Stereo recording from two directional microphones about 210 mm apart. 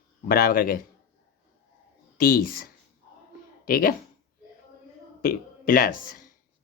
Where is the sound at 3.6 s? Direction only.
45° left (ahead or behind).